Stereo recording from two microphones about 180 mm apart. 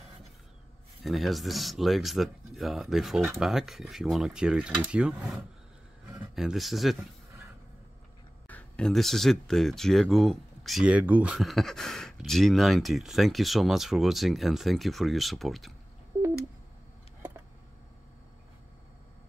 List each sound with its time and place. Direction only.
1.0 s speech: centre (ahead or behind)
8.5 s speech: 5° left (ahead or behind)
16.1 s a sound: 15° right (ahead or behind)